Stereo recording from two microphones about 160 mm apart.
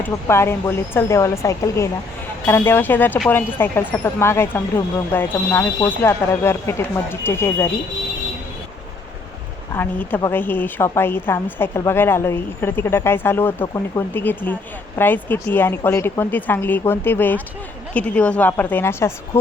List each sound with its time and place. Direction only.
0.0 s a woman's voice: 15° left (ahead or behind)
9.7 s a woman's voice: 10° left (ahead or behind)